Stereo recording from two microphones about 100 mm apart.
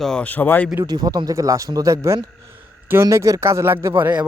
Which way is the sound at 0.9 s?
40° right (ahead or behind).